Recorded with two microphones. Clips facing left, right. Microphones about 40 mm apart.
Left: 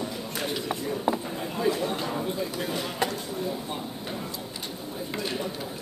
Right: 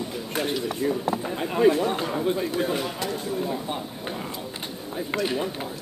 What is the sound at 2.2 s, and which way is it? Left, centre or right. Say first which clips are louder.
Speech: right 6 dB; right.